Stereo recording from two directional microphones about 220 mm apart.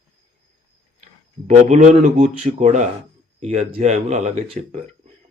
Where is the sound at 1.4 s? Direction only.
35° right (ahead or behind).